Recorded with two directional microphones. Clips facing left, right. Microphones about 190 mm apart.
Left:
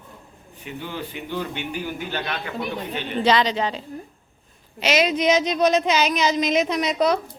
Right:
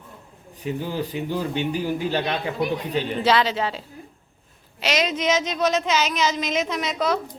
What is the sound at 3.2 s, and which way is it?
A woman's voice, 5° right (ahead or behind).